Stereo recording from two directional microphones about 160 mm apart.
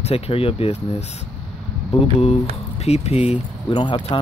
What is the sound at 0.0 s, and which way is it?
Speech, 40° left (ahead or behind).